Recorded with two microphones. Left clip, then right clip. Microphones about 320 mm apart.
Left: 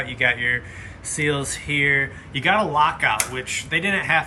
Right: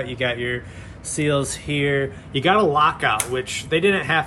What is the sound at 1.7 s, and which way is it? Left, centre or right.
Speech, centre.